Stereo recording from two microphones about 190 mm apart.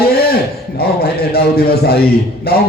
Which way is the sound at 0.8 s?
55° left (ahead or behind).